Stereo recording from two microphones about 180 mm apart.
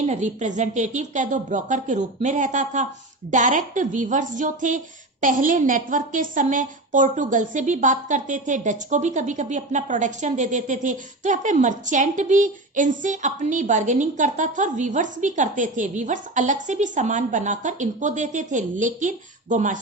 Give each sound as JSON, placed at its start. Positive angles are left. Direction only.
{"t": 0.0, "sound": "a woman's voice", "side_deg": -40}